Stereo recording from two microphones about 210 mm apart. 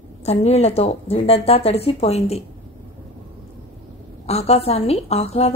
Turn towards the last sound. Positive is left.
turn(degrees=30)  # may be behind; listen again after turning